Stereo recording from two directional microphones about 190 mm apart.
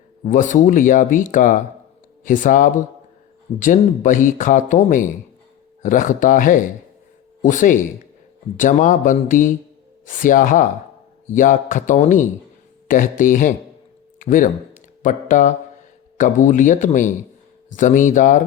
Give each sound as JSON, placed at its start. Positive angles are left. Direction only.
{"t": 0.3, "sound": "speech", "side_deg": 45}